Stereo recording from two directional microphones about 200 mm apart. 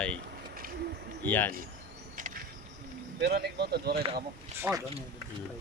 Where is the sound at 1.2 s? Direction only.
10° left (ahead or behind).